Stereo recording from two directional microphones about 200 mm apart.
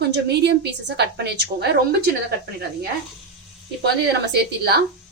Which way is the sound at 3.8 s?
55° right (ahead or behind).